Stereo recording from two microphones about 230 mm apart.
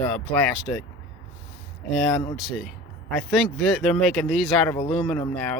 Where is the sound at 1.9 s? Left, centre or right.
Centre.